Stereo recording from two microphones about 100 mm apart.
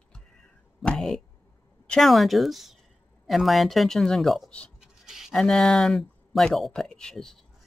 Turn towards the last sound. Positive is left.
turn(degrees=5)  # may be behind; listen again after turning